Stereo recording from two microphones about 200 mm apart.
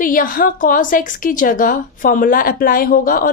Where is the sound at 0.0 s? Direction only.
45° left (ahead or behind).